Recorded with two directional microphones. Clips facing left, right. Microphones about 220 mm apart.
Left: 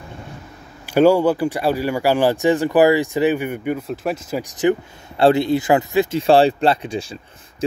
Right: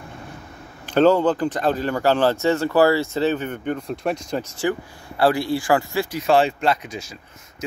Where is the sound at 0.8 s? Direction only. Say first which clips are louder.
Left 2 dB; 10° left (ahead or behind).